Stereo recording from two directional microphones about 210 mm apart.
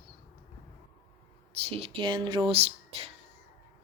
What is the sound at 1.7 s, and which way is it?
Speech, 30° right (ahead or behind).